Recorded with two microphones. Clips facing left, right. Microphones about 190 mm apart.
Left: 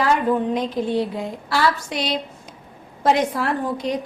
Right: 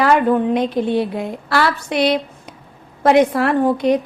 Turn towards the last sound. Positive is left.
turn(degrees=-60)  # may be behind; listen again after turning